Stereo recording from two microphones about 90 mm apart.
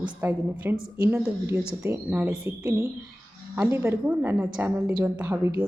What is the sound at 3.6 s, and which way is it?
A woman's voice, 30° right (ahead or behind).